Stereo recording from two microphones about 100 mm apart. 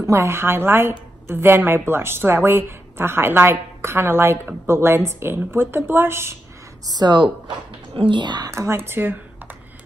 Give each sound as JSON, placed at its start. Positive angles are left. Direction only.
{"t": 0.0, "sound": "a woman's voice", "side_deg": -30}
{"t": 6.9, "sound": "speech", "side_deg": -45}
{"t": 7.9, "sound": "speech", "side_deg": -60}
{"t": 8.5, "sound": "a woman's voice", "side_deg": -30}